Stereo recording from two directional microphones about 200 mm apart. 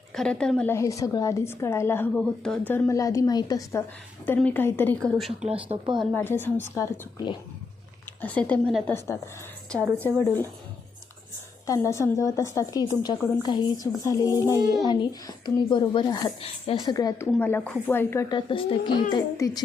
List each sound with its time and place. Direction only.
0.1 s a woman's voice: 5° left (ahead or behind)
2.1 s a woman's voice: 5° left (ahead or behind)
5.6 s speech: 25° right (ahead or behind)
6.1 s a woman's voice: 10° left (ahead or behind)
8.2 s a woman's voice: 5° left (ahead or behind)
11.6 s a woman's voice: 15° left (ahead or behind)
14.4 s child singing: 15° right (ahead or behind)
14.8 s a woman's voice: 20° left (ahead or behind)
17.3 s a woman's voice: 10° left (ahead or behind)